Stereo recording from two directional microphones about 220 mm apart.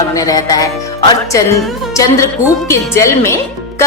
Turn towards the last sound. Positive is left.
turn(degrees=10)  # may be behind; listen again after turning